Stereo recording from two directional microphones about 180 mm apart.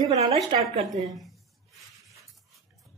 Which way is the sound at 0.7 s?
45° right (ahead or behind).